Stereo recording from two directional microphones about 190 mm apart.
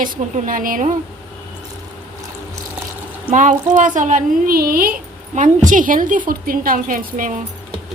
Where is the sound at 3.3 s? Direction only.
45° right (ahead or behind).